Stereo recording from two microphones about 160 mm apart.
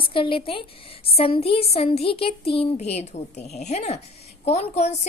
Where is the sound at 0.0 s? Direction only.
35° left (ahead or behind).